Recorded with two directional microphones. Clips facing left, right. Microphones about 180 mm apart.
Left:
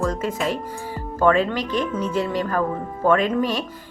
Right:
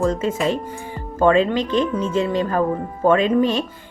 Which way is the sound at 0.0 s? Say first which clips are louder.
Right 4 dB; 25° right (ahead or behind).